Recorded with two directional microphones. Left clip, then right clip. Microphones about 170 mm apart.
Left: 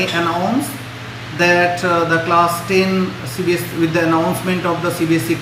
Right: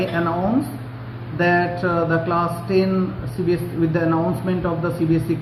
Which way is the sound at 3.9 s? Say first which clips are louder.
Left 6 dB; 15° left (ahead or behind).